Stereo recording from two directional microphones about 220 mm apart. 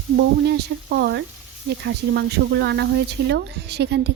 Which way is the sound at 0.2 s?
50° right (ahead or behind).